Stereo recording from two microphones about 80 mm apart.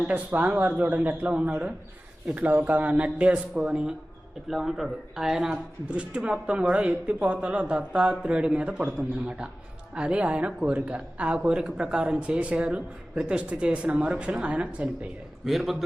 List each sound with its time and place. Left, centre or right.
0.1 s speech: centre
15.4 s a man's voice: centre